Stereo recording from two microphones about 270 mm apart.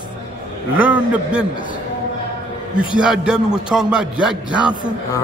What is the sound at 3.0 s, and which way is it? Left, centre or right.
Speech, centre.